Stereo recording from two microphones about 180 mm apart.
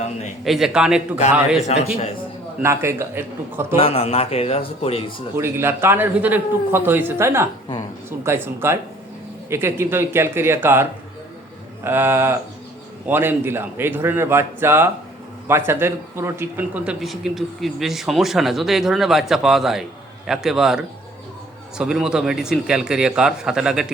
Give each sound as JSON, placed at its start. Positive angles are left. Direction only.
{"t": 0.4, "sound": "a man's voice", "side_deg": 0}
{"t": 1.6, "sound": "a man's voice", "side_deg": 35}
{"t": 2.6, "sound": "a man's voice", "side_deg": -15}
{"t": 3.8, "sound": "a man's voice", "side_deg": 35}
{"t": 5.4, "sound": "a man's voice", "side_deg": -15}